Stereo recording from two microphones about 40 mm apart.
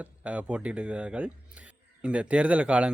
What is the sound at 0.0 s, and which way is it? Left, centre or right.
A man's voice, right.